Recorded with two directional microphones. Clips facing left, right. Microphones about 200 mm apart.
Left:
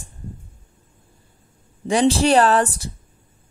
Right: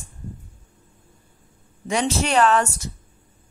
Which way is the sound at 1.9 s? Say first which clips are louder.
Left 7 dB; 30° left (ahead or behind).